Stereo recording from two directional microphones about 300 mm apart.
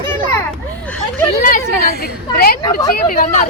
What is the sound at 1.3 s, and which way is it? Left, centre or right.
Speech, left.